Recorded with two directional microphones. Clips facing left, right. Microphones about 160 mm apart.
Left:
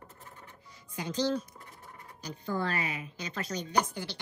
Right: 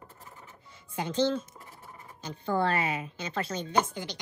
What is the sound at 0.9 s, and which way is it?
Speech, 25° right (ahead or behind).